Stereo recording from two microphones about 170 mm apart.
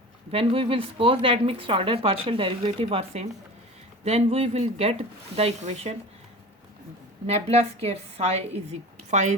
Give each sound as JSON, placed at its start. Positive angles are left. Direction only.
{"t": 0.3, "sound": "speech", "side_deg": -35}
{"t": 7.3, "sound": "speech", "side_deg": -40}